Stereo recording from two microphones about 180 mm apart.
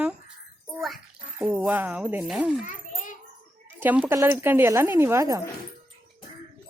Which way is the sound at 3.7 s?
10° right (ahead or behind).